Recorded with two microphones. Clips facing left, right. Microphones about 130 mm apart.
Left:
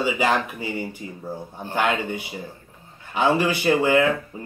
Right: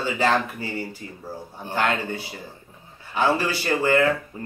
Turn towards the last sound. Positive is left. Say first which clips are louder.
# left 2 dB
turn(degrees=15)  # may be behind; listen again after turning